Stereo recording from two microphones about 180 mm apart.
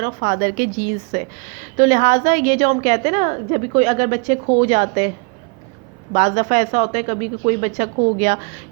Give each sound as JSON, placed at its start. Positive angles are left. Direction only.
{"t": 0.0, "sound": "a woman's voice", "side_deg": -50}
{"t": 6.1, "sound": "a woman's voice", "side_deg": -45}